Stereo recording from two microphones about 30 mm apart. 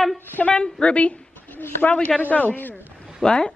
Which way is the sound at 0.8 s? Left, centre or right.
Left.